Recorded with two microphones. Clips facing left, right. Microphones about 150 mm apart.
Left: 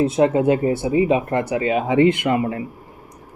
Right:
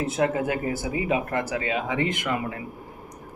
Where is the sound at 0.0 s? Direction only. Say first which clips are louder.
Left 8 dB; 25° left (ahead or behind).